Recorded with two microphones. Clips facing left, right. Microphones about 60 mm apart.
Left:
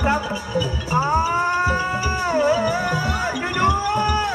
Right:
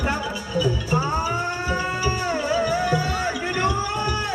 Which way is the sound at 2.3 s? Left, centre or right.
Left.